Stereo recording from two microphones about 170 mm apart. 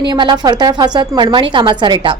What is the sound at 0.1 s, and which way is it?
A woman's voice, 25° right (ahead or behind).